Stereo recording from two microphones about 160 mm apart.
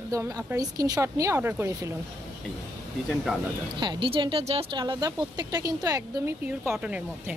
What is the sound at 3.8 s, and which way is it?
Speech, 30° right (ahead or behind).